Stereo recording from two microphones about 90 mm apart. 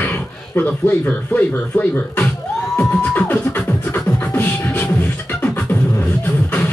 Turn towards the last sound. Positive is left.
turn(degrees=20)  # may be behind; listen again after turning